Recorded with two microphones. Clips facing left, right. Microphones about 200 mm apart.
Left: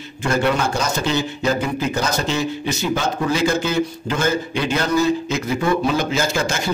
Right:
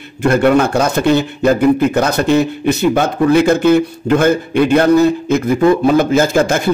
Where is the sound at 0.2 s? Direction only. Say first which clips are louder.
Right 8 dB; 55° right (ahead or behind).